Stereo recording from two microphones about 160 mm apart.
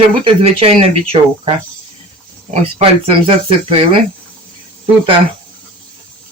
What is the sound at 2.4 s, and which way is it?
Speech, 40° right (ahead or behind).